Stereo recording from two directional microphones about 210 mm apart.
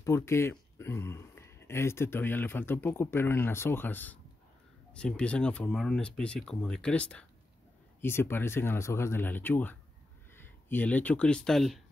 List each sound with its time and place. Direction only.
0.0 s speech: 10° left (ahead or behind)